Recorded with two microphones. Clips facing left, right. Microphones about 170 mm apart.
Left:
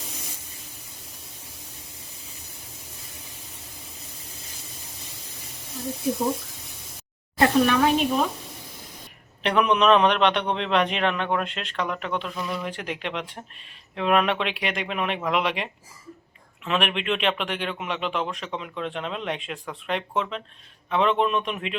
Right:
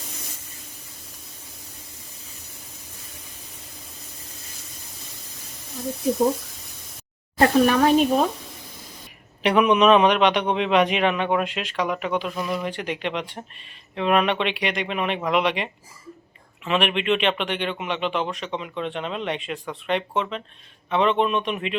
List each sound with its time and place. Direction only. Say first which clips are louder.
7.3 s speech: right 2 dB; 40° right (ahead or behind)
9.4 s a man's voice: right 3 dB; 5° right (ahead or behind)